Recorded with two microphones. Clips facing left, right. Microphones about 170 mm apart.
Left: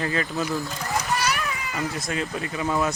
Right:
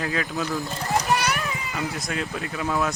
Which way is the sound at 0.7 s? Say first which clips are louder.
Right 3 dB; 35° right (ahead or behind).